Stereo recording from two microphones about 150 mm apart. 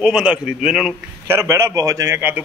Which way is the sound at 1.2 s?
15° right (ahead or behind).